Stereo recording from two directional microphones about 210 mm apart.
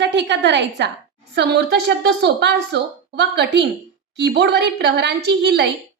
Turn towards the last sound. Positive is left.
turn(degrees=-55)  # may be behind; listen again after turning